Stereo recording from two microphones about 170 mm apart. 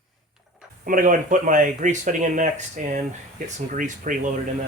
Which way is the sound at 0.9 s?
50° right (ahead or behind).